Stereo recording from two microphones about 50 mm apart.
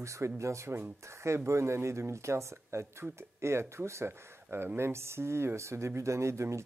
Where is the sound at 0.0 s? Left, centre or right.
Right.